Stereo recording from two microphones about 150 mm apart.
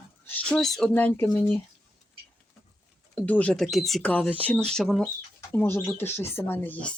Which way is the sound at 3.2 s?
10° left (ahead or behind).